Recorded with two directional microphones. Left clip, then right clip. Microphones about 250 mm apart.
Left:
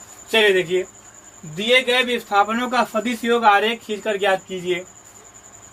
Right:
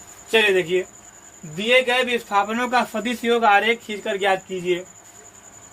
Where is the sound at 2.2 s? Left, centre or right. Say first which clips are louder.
Left 2 dB; right.